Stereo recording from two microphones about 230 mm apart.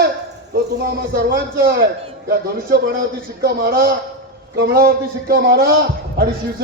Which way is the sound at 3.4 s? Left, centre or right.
Right.